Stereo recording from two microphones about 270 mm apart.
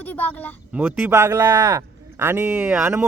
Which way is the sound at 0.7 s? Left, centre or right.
Centre.